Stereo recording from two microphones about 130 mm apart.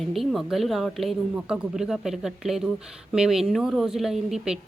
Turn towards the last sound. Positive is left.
turn(degrees=-5)  # may be behind; listen again after turning